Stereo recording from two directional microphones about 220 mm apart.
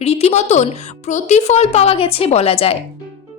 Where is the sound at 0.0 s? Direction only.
30° left (ahead or behind).